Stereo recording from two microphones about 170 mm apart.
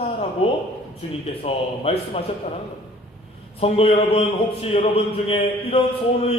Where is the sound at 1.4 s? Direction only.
35° left (ahead or behind).